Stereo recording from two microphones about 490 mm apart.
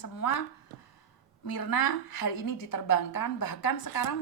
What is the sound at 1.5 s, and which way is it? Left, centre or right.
A woman's voice, left.